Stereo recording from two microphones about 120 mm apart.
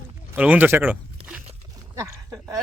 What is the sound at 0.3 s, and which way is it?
Speech, 10° right (ahead or behind).